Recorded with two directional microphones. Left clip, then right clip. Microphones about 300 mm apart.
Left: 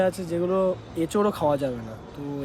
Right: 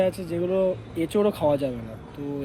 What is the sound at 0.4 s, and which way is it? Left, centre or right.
Speech, left.